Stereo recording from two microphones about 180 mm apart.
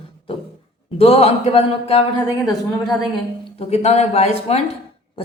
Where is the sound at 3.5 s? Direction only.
35° left (ahead or behind).